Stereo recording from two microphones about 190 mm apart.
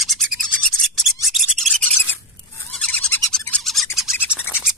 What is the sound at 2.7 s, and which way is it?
Owl, 5° left (ahead or behind).